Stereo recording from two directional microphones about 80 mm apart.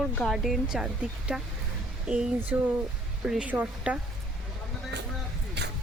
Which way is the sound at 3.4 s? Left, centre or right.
Centre.